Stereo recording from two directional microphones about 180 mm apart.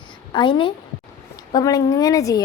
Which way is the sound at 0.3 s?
25° left (ahead or behind).